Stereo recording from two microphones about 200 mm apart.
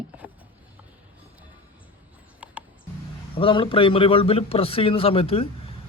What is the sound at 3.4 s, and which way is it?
A man's voice, 25° left (ahead or behind).